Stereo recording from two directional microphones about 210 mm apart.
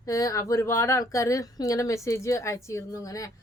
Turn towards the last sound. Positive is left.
turn(degrees=15)  # may be behind; listen again after turning